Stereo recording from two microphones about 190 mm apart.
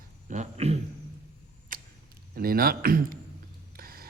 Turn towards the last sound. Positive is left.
turn(degrees=-50)  # may be behind; listen again after turning